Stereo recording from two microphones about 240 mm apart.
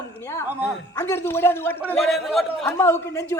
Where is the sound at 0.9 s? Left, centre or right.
Centre.